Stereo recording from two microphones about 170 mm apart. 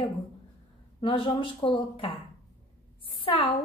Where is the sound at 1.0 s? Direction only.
30° left (ahead or behind).